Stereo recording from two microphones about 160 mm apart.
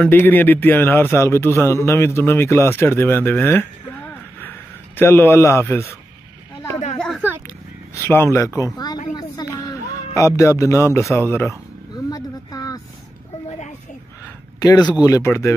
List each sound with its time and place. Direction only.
0.0 s a man's voice: 10° left (ahead or behind)
7.9 s a man's voice: 15° left (ahead or behind)
9.1 s a sound: 25° left (ahead or behind)
10.1 s a man's voice: 20° left (ahead or behind)
11.9 s a sound: 25° left (ahead or behind)
14.6 s a man's voice: 25° left (ahead or behind)